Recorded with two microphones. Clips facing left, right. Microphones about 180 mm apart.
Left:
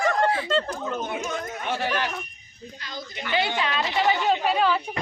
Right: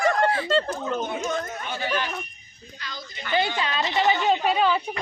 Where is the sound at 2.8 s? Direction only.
50° left (ahead or behind).